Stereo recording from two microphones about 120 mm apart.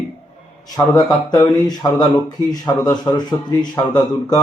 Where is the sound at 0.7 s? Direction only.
30° left (ahead or behind).